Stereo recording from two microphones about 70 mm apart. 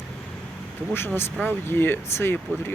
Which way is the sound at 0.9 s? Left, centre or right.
Left.